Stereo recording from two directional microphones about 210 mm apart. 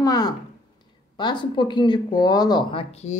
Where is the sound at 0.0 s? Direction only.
20° left (ahead or behind).